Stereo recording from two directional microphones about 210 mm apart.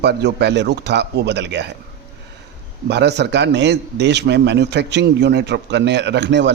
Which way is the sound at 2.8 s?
55° right (ahead or behind).